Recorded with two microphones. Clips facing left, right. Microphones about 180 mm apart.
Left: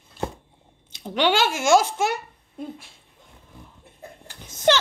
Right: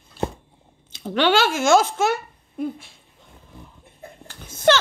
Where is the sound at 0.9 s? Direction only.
15° left (ahead or behind).